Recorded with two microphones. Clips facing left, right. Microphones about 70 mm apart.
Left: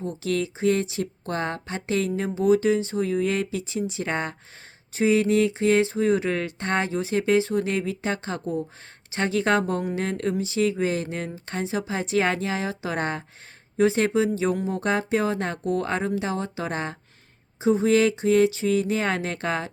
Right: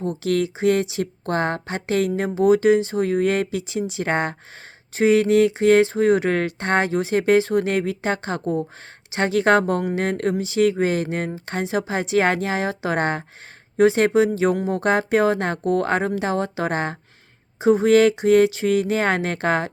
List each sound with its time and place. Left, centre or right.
0.0 s speech: right